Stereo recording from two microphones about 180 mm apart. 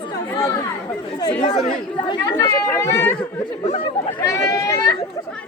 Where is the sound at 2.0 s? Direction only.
25° left (ahead or behind).